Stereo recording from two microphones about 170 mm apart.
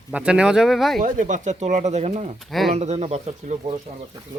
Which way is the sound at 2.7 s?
40° right (ahead or behind).